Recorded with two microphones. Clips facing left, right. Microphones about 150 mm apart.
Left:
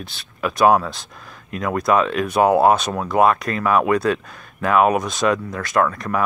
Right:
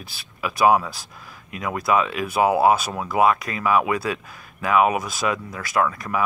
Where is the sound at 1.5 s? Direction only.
45° left (ahead or behind).